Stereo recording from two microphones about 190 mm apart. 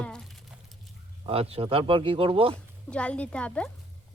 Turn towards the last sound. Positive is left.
turn(degrees=5)  # may be behind; listen again after turning